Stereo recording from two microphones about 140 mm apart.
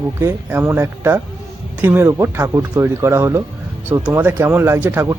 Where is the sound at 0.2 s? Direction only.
20° right (ahead or behind).